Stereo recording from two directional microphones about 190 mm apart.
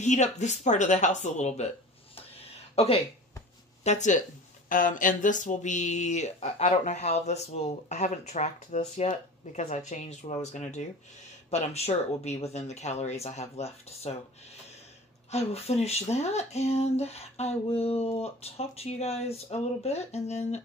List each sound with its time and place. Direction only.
0.0 s speech: 40° left (ahead or behind)
2.7 s speech: 30° left (ahead or behind)
15.3 s speech: 35° left (ahead or behind)